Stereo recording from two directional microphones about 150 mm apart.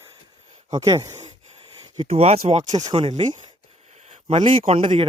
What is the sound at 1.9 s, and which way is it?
Speech, 40° right (ahead or behind).